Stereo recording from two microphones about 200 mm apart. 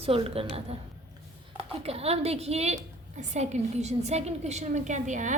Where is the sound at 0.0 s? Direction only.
30° right (ahead or behind).